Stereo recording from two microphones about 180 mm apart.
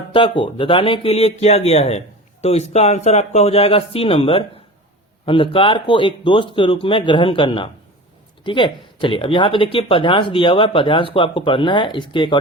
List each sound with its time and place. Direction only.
0.1 s speech: 30° left (ahead or behind)